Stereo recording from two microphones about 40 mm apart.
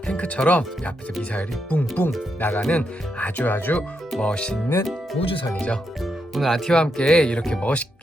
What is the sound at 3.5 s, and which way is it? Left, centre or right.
Speech, left.